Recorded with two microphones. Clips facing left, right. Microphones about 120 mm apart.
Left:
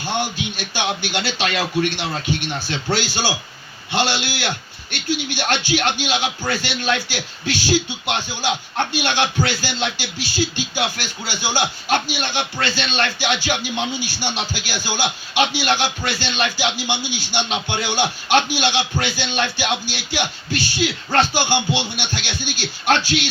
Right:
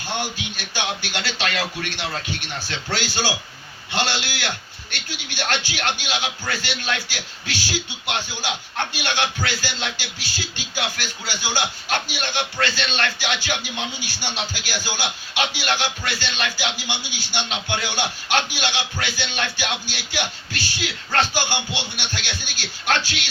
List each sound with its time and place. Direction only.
0.0 s a man's voice: 15° left (ahead or behind)